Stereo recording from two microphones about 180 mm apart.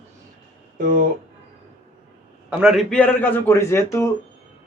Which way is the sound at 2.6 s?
Centre (ahead or behind).